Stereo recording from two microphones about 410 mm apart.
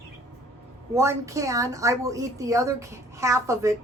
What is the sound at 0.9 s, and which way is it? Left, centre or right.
A woman's voice, centre.